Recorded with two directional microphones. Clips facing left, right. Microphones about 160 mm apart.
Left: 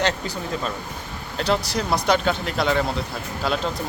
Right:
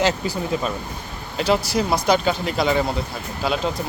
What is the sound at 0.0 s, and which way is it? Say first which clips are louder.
Speech: right 3 dB; 10° right (ahead or behind).